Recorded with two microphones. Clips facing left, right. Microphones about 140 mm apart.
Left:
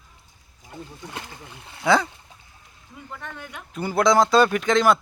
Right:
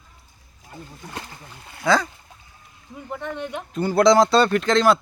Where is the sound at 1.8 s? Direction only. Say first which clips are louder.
Even; 20° left (ahead or behind).